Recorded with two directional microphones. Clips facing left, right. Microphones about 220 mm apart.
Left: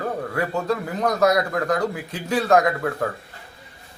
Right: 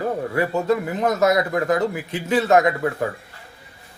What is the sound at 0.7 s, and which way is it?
A man's voice, 25° right (ahead or behind).